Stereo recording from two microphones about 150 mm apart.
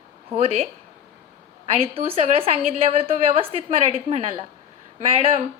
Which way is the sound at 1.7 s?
45° right (ahead or behind).